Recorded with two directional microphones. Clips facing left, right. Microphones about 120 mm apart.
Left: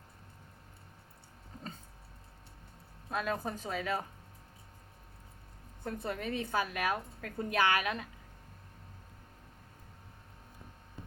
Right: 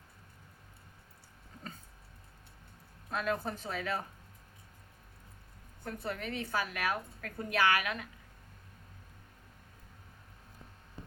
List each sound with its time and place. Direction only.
3.1 s a woman's voice: 15° left (ahead or behind)
5.8 s a woman's voice: 20° left (ahead or behind)